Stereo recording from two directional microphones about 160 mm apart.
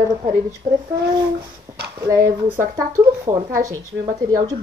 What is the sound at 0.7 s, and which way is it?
Speech, 60° right (ahead or behind).